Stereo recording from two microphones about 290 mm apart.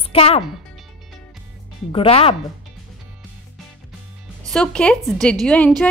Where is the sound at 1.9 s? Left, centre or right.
Centre.